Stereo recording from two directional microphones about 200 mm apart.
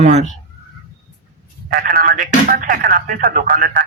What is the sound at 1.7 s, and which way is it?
Speech, 45° right (ahead or behind).